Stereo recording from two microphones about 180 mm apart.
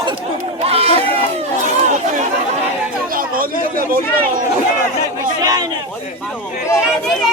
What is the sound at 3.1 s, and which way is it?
Chatter, 50° right (ahead or behind).